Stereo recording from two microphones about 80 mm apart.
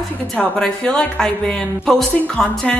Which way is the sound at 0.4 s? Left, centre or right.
Centre.